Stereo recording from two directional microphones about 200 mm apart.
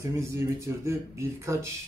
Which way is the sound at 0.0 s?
15° right (ahead or behind).